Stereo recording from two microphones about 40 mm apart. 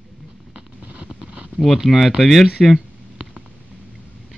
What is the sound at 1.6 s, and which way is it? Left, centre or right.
Speech, centre.